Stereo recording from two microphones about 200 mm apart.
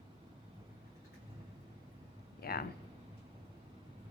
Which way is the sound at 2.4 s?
50° left (ahead or behind).